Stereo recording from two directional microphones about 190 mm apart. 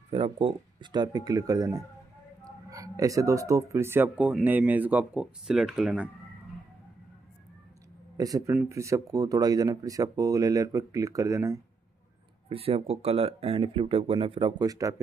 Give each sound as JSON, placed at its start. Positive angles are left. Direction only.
{"t": 0.1, "sound": "speech", "side_deg": -30}
{"t": 8.2, "sound": "speech", "side_deg": -20}
{"t": 12.4, "sound": "speech", "side_deg": -30}